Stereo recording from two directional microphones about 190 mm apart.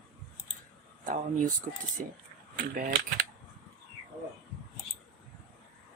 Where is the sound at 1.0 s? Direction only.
45° right (ahead or behind).